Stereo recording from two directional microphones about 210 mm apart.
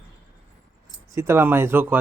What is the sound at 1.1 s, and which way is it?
Speech, 10° right (ahead or behind).